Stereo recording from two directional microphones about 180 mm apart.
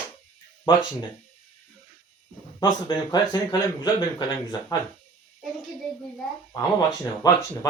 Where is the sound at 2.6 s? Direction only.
20° left (ahead or behind).